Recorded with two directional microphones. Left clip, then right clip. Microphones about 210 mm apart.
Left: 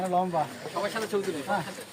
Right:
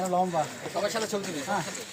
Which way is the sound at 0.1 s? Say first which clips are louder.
Even; 10° left (ahead or behind).